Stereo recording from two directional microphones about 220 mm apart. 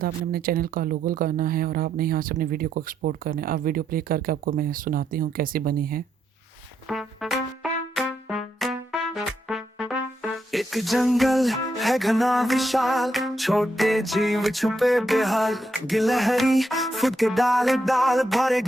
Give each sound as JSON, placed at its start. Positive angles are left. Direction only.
{"t": 0.0, "sound": "speech", "side_deg": -40}
{"t": 6.8, "sound": "music", "side_deg": 0}